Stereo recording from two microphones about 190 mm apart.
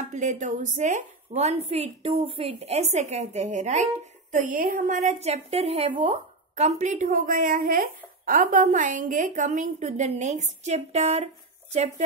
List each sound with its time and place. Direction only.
0.1 s a woman's voice: 40° right (ahead or behind)
6.8 s a woman's voice: 40° right (ahead or behind)